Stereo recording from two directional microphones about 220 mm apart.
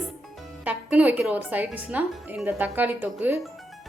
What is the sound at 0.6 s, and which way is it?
Speech, 5° right (ahead or behind).